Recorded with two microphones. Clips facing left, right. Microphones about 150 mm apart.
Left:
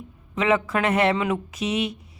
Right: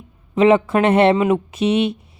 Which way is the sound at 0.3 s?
25° right (ahead or behind).